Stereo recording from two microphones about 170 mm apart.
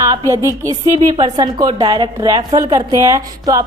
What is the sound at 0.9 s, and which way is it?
Speech, 40° right (ahead or behind).